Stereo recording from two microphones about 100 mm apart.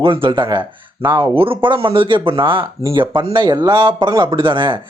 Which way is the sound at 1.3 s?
65° right (ahead or behind).